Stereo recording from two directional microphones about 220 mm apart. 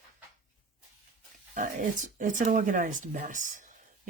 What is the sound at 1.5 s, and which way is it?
Speech, 35° right (ahead or behind).